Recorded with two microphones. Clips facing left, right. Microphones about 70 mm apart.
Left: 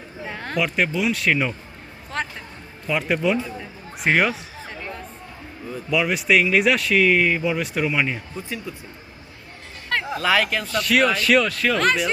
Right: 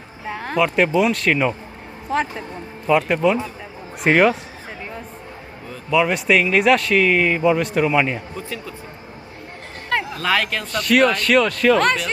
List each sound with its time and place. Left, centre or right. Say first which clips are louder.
0.3 s speech: right 5 dB; centre
3.3 s speech: right 1 dB; centre
4.8 s a sound: right 1 dB; centre
5.9 s speech: right 3 dB; centre
8.4 s speech: right 1 dB; centre
10.2 s speech: left 4 dB; centre